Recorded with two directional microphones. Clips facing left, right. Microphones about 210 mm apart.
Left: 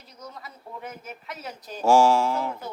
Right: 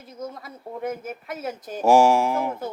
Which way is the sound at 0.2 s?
50° right (ahead or behind).